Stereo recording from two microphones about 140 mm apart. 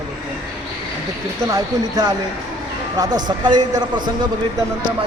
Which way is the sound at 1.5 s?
25° right (ahead or behind).